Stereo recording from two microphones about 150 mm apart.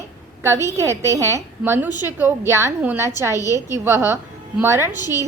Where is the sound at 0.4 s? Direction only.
15° right (ahead or behind).